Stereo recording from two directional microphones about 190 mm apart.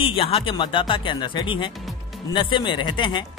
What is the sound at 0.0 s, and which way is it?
Speech, 30° left (ahead or behind).